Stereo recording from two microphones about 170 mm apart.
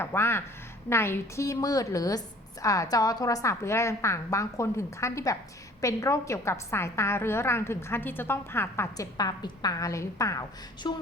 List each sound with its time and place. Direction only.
0.0 s a woman's voice: 15° left (ahead or behind)